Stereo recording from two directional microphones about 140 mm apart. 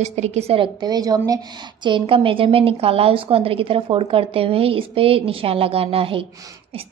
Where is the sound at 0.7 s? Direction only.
30° right (ahead or behind).